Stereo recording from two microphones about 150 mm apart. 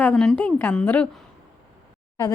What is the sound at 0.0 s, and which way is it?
A woman's voice, 5° left (ahead or behind).